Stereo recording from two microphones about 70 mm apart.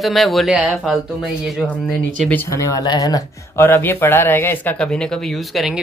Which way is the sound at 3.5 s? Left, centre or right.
Left.